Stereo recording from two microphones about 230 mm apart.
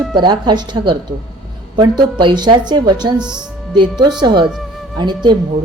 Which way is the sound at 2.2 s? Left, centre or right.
Centre.